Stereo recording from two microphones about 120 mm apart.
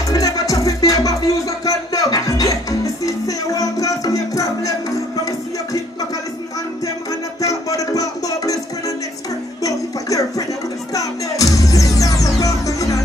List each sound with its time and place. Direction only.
0.1 s music: 30° left (ahead or behind)
7.4 s music: 30° left (ahead or behind)
9.6 s a sound: 30° left (ahead or behind)
10.9 s music: 30° left (ahead or behind)